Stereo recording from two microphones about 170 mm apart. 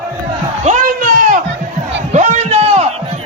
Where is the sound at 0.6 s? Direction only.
45° right (ahead or behind).